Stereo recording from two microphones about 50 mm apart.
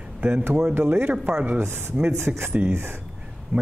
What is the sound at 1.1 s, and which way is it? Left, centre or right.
Speech, centre.